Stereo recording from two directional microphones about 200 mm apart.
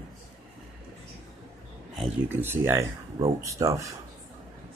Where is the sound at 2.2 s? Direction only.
10° right (ahead or behind).